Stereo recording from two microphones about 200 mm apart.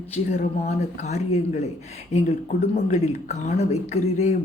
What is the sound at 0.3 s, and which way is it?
Speech, 35° left (ahead or behind).